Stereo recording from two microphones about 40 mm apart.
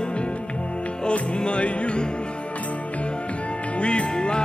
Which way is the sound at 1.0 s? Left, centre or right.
Left.